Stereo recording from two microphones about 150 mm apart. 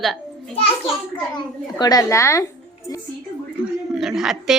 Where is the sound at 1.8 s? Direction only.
25° left (ahead or behind).